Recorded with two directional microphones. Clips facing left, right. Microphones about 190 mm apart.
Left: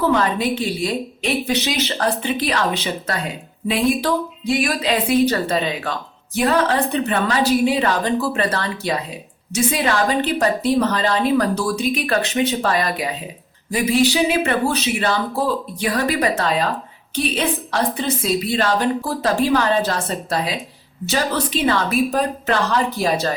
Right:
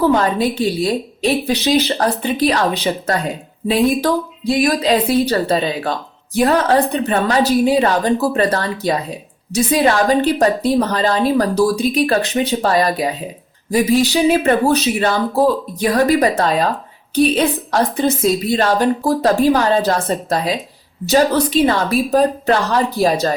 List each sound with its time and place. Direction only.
0.1 s a woman's voice: 35° right (ahead or behind)
3.7 s a woman's voice: 40° right (ahead or behind)